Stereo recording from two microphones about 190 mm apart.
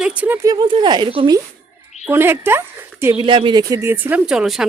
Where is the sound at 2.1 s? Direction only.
10° right (ahead or behind).